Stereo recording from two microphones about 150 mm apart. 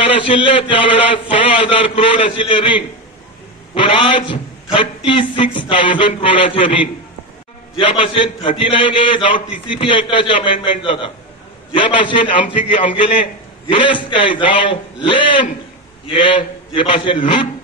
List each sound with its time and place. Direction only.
0.0 s a man's voice: 35° left (ahead or behind)